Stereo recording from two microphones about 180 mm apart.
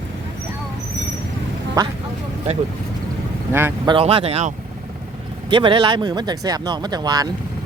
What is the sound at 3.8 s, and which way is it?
Speech, 30° right (ahead or behind).